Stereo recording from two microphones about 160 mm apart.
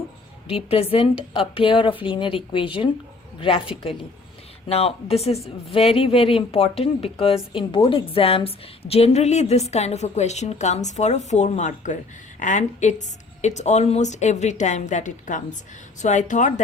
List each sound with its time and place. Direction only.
0.5 s speech: 40° left (ahead or behind)
4.7 s a woman's voice: 40° left (ahead or behind)